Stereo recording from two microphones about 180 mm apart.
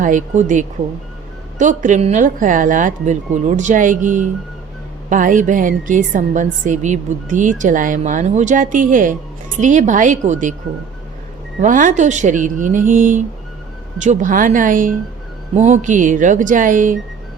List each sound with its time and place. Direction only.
0.0 s a woman's voice: 45° right (ahead or behind)
11.6 s a woman's voice: 45° right (ahead or behind)